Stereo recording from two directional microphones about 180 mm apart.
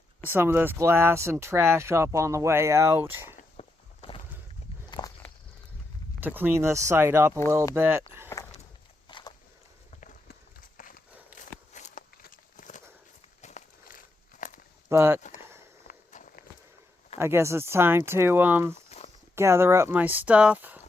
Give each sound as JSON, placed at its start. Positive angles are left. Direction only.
{"t": 0.3, "sound": "speech", "side_deg": -10}
{"t": 3.6, "sound": "walk", "side_deg": 30}
{"t": 6.1, "sound": "speech", "side_deg": -10}
{"t": 9.0, "sound": "walk", "side_deg": 25}
{"t": 10.8, "sound": "walk", "side_deg": 50}
{"t": 14.8, "sound": "speech", "side_deg": -15}
{"t": 15.9, "sound": "walk", "side_deg": 50}
{"t": 17.2, "sound": "speech", "side_deg": -15}
{"t": 18.9, "sound": "a sound", "side_deg": 35}
{"t": 19.4, "sound": "speech", "side_deg": -15}